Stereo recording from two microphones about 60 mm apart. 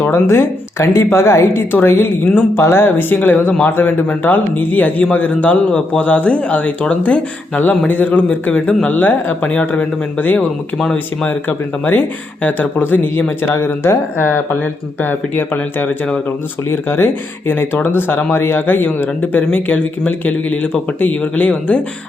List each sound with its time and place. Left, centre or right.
0.1 s a woman's voice: left
5.7 s a man's voice: centre
6.1 s speech: left
13.5 s a woman's voice: left
14.6 s speech: left